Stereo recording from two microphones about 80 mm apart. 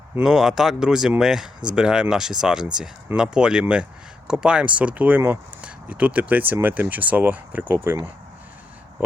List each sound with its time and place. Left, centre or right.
0.2 s speech: centre; by 7.9 s right